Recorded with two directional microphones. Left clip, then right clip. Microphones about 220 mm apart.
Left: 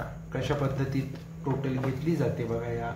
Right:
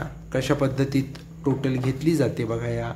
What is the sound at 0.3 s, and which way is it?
Speech, 55° right (ahead or behind).